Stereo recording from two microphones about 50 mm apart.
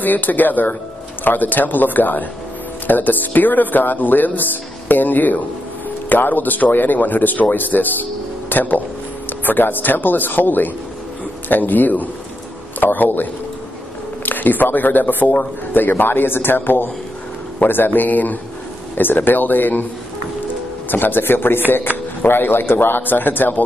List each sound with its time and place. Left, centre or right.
0.0 s a man's voice: left
20.9 s a man's voice: left